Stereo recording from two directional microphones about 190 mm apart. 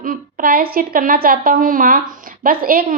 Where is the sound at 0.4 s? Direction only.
50° right (ahead or behind).